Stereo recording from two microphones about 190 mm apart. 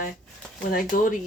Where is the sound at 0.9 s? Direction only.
45° left (ahead or behind).